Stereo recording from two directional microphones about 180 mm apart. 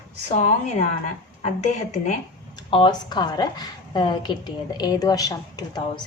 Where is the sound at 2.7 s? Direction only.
25° left (ahead or behind).